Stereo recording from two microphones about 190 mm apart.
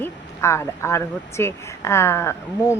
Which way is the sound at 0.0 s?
15° left (ahead or behind).